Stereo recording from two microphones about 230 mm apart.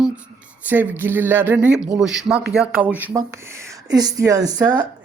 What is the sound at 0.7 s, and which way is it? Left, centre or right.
Speech, centre.